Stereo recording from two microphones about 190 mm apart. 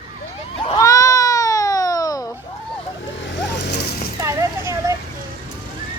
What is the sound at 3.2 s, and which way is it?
Vehicle, 70° left (ahead or behind).